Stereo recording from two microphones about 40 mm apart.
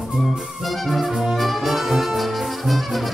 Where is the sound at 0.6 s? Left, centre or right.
Centre.